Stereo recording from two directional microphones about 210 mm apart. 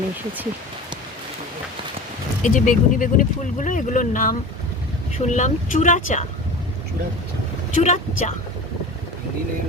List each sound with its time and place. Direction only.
2.4 s speech: 35° left (ahead or behind)
7.8 s speech: 35° left (ahead or behind)